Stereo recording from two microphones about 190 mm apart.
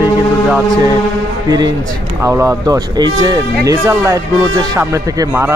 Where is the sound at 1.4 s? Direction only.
20° right (ahead or behind).